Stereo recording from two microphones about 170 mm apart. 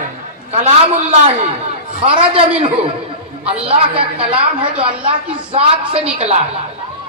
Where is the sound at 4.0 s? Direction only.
35° right (ahead or behind).